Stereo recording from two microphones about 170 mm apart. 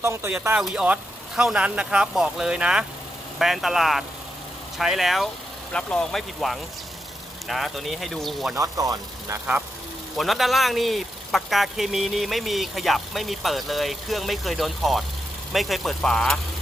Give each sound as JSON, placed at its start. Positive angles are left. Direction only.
{"t": 0.0, "sound": "speech", "side_deg": -15}
{"t": 8.5, "sound": "speech", "side_deg": -20}
{"t": 10.2, "sound": "speech", "side_deg": 0}